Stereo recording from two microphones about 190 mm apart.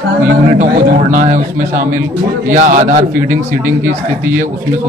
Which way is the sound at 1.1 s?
45° right (ahead or behind).